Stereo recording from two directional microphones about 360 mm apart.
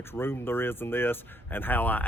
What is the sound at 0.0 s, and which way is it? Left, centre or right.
Speech, centre.